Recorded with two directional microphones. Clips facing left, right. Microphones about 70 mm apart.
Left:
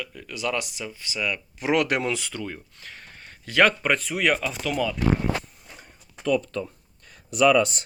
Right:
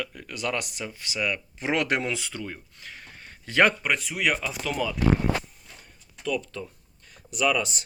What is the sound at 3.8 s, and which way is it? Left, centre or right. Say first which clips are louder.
Speech: left 3 dB; centre.